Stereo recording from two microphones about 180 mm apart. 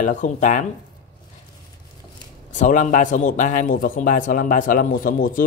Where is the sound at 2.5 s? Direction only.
45° left (ahead or behind).